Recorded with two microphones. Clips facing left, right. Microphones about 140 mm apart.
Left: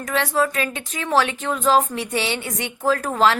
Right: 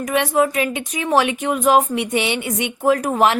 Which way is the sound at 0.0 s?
15° right (ahead or behind).